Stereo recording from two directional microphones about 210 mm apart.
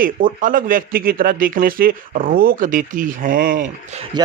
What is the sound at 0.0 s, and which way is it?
Speech, 40° right (ahead or behind).